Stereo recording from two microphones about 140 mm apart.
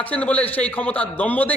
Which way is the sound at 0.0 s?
10° left (ahead or behind).